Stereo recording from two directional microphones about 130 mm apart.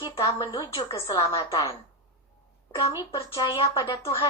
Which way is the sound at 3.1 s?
40° left (ahead or behind).